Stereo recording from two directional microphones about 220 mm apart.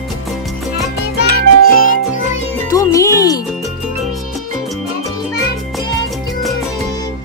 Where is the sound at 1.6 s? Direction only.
40° left (ahead or behind).